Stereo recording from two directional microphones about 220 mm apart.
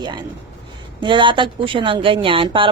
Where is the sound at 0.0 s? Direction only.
20° right (ahead or behind).